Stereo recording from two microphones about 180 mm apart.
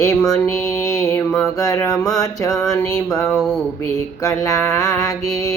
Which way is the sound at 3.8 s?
15° left (ahead or behind).